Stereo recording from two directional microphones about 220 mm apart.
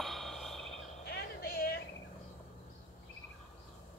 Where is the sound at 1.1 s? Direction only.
45° left (ahead or behind).